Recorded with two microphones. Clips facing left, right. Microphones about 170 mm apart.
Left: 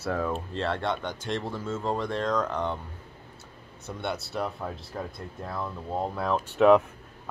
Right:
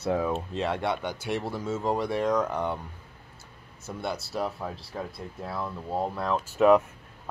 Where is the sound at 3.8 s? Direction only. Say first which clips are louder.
Even; centre (ahead or behind).